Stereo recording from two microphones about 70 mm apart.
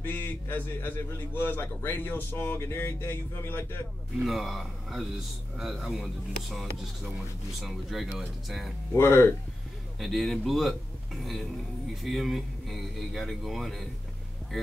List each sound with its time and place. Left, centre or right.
0.0 s a man's voice: left
4.2 s speech: centre
8.9 s a man's voice: left
9.9 s speech: centre
12.0 s speech: centre